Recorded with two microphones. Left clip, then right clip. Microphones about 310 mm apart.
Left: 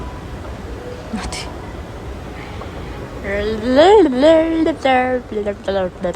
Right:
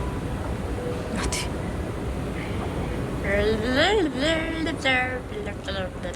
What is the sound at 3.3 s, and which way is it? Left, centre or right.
Speech, centre.